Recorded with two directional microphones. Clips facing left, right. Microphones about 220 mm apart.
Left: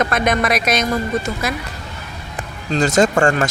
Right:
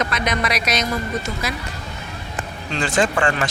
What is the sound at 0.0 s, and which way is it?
Speech, 50° left (ahead or behind).